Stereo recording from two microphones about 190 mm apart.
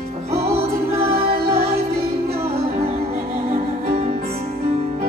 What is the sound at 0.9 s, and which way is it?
Music, 15° right (ahead or behind).